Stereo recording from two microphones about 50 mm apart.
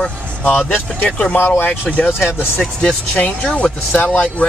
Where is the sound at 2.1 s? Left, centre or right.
Left.